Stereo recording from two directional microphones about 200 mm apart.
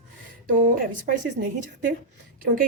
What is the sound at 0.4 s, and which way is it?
Speech, 45° right (ahead or behind).